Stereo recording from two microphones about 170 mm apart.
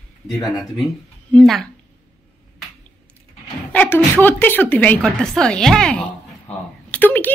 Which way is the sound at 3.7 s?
10° left (ahead or behind).